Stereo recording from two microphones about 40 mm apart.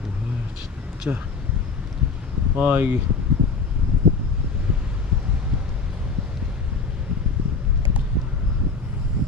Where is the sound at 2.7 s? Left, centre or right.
Right.